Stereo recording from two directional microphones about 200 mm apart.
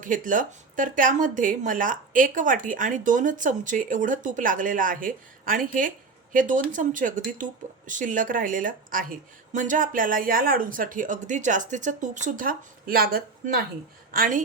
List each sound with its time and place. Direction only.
0.0 s a woman's voice: 40° right (ahead or behind)